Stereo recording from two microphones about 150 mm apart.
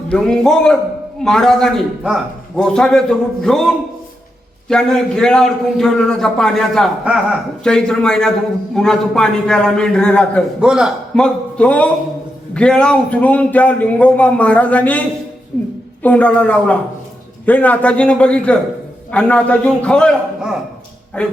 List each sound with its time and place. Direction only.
0.1 s a man's voice: 5° left (ahead or behind)
4.7 s a man's voice: 5° left (ahead or behind)
10.6 s a man's voice: 5° right (ahead or behind)
16.0 s a man's voice: 10° left (ahead or behind)